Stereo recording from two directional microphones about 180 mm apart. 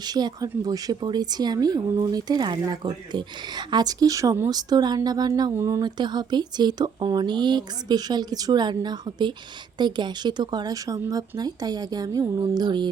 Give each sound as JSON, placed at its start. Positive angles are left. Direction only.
{"t": 0.0, "sound": "speech", "side_deg": -25}